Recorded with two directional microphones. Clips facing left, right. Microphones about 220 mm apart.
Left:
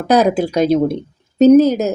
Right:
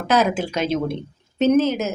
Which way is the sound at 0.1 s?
40° left (ahead or behind).